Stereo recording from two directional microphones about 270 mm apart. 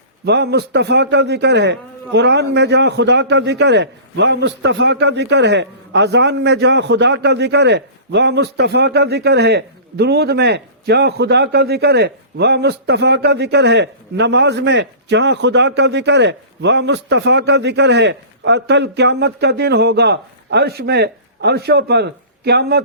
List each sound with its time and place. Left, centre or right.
0.3 s a man's voice: right